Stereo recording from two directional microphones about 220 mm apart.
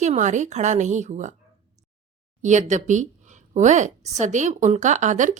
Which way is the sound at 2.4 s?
35° right (ahead or behind).